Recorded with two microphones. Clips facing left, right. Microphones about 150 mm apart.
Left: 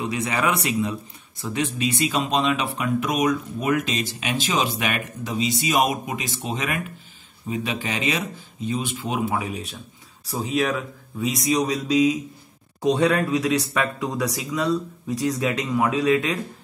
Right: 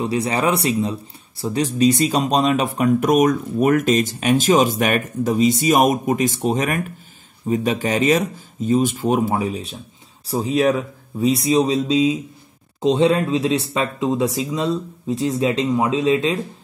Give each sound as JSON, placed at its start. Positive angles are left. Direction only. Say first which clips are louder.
{"t": 0.0, "sound": "speech", "louder": "right 4 dB", "side_deg": -35}